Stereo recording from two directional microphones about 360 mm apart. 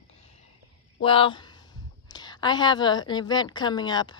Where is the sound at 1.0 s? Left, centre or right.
Centre.